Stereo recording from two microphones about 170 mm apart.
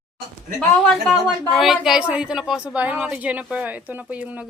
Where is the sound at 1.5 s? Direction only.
Centre (ahead or behind).